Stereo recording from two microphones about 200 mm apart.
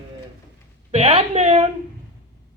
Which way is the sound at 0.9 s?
30° right (ahead or behind).